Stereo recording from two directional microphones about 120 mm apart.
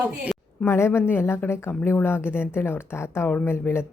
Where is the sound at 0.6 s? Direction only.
20° left (ahead or behind).